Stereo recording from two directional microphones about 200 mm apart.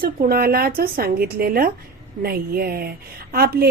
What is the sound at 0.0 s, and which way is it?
A woman's voice, 50° right (ahead or behind).